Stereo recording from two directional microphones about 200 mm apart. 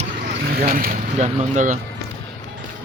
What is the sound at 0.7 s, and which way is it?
Speech, 45° right (ahead or behind).